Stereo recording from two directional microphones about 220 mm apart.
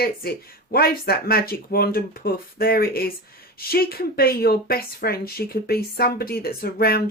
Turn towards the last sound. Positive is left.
turn(degrees=45)  # may be behind; listen again after turning